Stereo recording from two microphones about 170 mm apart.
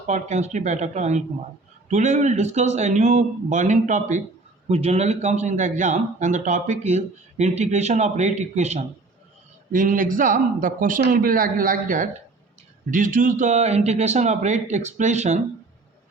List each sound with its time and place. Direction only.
0.1 s a man's voice: 45° right (ahead or behind)